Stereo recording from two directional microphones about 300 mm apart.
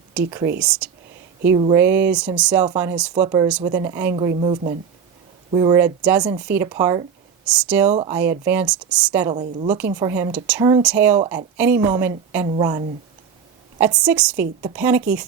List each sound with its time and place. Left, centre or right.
0.1 s speech: centre
1.5 s a woman's voice: centre
1.8 s a woman's voice: centre
7.9 s a woman's voice: centre
9.3 s a woman's voice: right
9.9 s a woman's voice: centre